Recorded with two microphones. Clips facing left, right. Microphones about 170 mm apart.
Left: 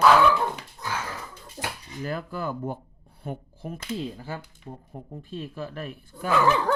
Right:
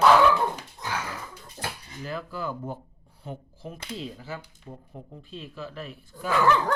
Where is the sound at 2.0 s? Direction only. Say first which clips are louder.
Left 2 dB; 50° left (ahead or behind).